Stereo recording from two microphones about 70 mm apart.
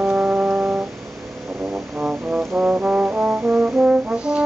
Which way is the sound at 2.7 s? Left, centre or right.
Right.